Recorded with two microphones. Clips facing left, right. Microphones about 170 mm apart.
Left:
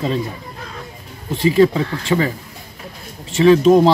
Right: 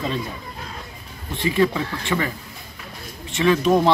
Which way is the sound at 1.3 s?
35° left (ahead or behind).